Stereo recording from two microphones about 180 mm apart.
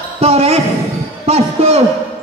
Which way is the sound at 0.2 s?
35° right (ahead or behind).